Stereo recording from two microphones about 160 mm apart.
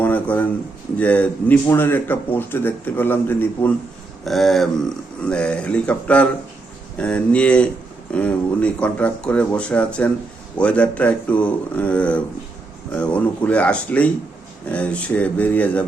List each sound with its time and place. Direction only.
0.0 s a sound: 10° left (ahead or behind)
0.9 s a man's voice: 10° left (ahead or behind)
4.3 s a man's voice: centre (ahead or behind)